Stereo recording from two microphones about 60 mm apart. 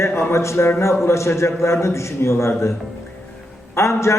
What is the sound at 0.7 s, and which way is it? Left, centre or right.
Speech, left.